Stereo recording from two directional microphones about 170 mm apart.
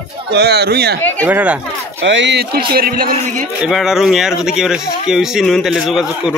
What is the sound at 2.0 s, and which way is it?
A man's voice, 90° right.